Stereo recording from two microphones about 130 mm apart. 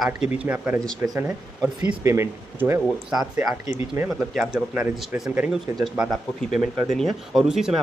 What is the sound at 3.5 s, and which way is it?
Speech, 20° right (ahead or behind).